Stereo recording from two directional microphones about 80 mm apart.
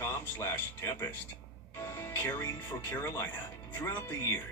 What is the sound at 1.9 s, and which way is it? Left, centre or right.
Speech, left.